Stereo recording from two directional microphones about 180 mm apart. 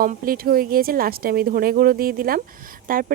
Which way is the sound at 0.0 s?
55° right (ahead or behind).